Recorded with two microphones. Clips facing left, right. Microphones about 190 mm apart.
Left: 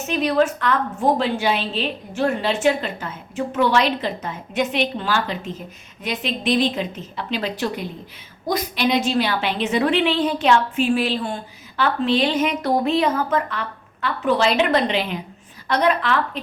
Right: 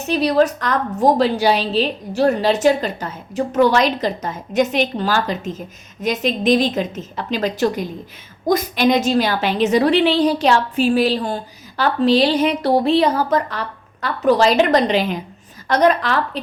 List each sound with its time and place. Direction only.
0.1 s a woman's voice: 35° right (ahead or behind)